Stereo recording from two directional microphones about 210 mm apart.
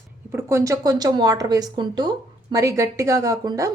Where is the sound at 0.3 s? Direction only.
15° right (ahead or behind).